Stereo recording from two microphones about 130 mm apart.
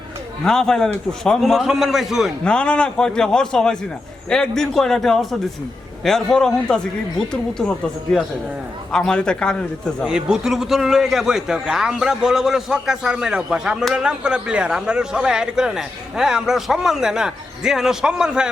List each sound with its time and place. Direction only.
0.4 s a man's voice: 5° left (ahead or behind)
8.9 s a man's voice: 5° left (ahead or behind)
10.0 s a man's voice: 5° right (ahead or behind)